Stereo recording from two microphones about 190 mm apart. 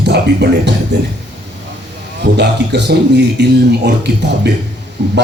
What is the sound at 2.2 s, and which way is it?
Speech, 65° right (ahead or behind).